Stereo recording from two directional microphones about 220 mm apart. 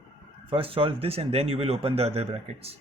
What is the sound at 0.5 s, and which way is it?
Speech, 25° right (ahead or behind).